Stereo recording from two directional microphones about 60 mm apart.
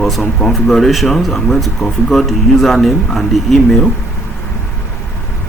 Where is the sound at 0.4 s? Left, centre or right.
Centre.